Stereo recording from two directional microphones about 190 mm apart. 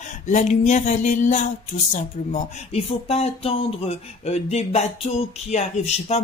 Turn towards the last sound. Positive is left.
turn(degrees=35)  # may be behind; listen again after turning